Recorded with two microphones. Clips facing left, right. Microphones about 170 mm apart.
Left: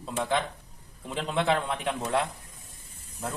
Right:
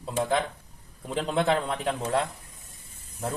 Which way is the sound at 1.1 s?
40° right (ahead or behind).